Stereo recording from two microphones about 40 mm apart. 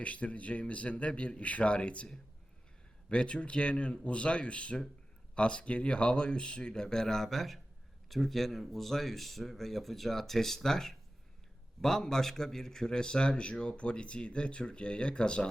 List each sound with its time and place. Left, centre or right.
0.0 s speech: left
3.1 s speech: left